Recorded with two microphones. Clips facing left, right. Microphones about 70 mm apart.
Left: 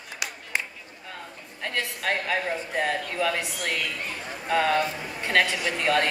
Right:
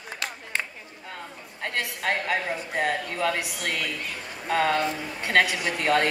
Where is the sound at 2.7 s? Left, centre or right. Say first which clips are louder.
Right 2 dB; right.